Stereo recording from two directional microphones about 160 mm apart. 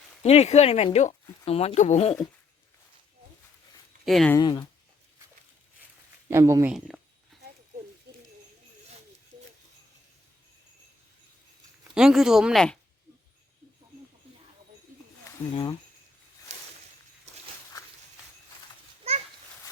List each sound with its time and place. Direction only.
0.2 s speech: 40° left (ahead or behind)
4.0 s speech: centre (ahead or behind)
4.4 s speech: 25° left (ahead or behind)
6.3 s speech: 15° right (ahead or behind)
6.7 s speech: 5° right (ahead or behind)
11.9 s speech: 5° right (ahead or behind)
15.5 s speech: 30° left (ahead or behind)
16.5 s a sound: 45° right (ahead or behind)